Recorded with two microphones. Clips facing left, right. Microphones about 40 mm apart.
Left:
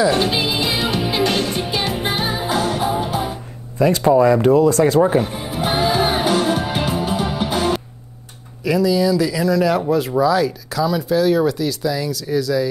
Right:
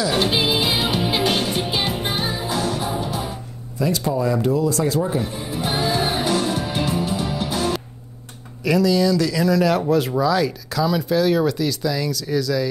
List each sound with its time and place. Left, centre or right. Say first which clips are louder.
0.1 s music: left 1 dB; centre
2.1 s music: left 3 dB; left
3.7 s music: left 8 dB; left
8.6 s speech: left 1 dB; centre